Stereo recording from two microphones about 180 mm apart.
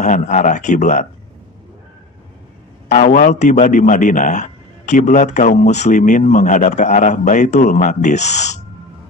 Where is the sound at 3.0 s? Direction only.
45° left (ahead or behind).